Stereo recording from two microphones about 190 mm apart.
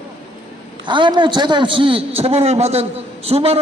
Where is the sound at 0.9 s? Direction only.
25° right (ahead or behind).